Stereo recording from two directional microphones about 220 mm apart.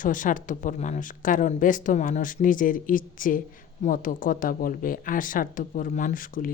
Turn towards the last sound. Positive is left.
turn(degrees=40)  # may be behind; listen again after turning